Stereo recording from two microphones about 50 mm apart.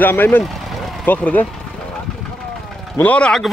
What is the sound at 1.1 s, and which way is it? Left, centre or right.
Speech, left.